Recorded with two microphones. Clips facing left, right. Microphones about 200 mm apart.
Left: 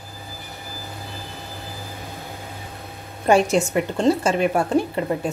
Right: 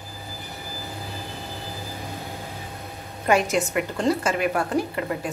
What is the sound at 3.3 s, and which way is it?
A woman's voice, 30° left (ahead or behind).